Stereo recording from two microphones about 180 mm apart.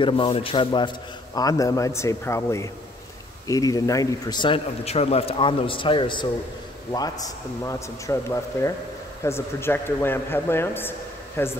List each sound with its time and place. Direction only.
0.0 s a man's voice: 30° left (ahead or behind); by 11.5 s 10° left (ahead or behind)